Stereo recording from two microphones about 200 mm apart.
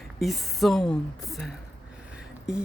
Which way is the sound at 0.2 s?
Centre (ahead or behind).